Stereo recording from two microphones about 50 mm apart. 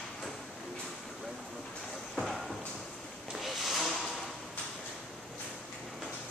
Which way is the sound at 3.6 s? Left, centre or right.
Centre.